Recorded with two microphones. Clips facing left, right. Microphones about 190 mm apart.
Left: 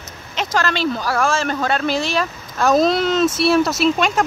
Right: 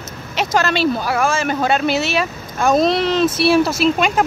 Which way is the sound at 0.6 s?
20° right (ahead or behind).